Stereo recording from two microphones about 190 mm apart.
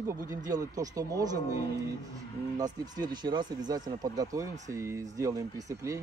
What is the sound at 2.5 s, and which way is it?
Speech, 20° right (ahead or behind).